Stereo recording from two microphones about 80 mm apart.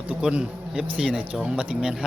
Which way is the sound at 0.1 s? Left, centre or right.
Centre.